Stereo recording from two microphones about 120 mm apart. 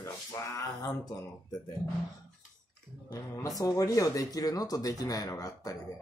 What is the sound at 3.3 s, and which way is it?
Speech, 30° left (ahead or behind).